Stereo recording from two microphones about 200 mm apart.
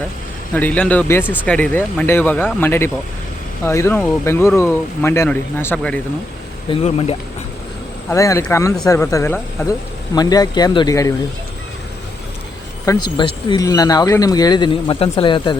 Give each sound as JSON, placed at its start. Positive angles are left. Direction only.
{"t": 0.5, "sound": "speech", "side_deg": 5}
{"t": 6.7, "sound": "speech", "side_deg": 30}
{"t": 8.1, "sound": "speech", "side_deg": 15}
{"t": 12.8, "sound": "speech", "side_deg": 20}